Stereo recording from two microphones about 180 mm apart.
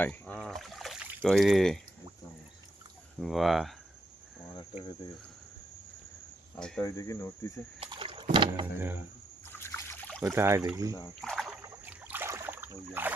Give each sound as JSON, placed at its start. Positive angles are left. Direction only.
{"t": 0.0, "sound": "speech", "side_deg": 10}
{"t": 3.2, "sound": "speech", "side_deg": 0}
{"t": 4.5, "sound": "cricket", "side_deg": 25}
{"t": 6.6, "sound": "speech", "side_deg": 5}
{"t": 6.8, "sound": "speech", "side_deg": 15}
{"t": 7.8, "sound": "a sound", "side_deg": -30}
{"t": 9.5, "sound": "trickle", "side_deg": 15}
{"t": 10.3, "sound": "speech", "side_deg": -15}
{"t": 11.2, "sound": "rowboat", "side_deg": 0}